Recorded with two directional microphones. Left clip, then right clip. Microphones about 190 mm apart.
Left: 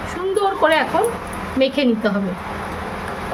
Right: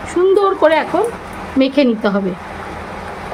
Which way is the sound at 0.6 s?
45° right (ahead or behind).